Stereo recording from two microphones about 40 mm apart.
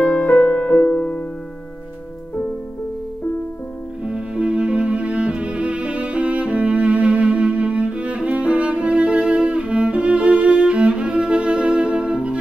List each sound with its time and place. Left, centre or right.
0.0 s music: left
4.0 s music: right